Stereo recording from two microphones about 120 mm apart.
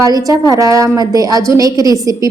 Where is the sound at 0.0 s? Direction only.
30° right (ahead or behind).